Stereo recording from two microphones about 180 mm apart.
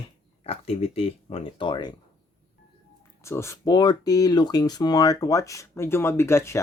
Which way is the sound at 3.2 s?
15° left (ahead or behind).